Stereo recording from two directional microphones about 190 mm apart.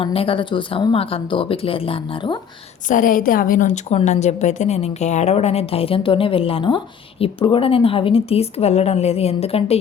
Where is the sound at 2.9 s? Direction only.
45° left (ahead or behind).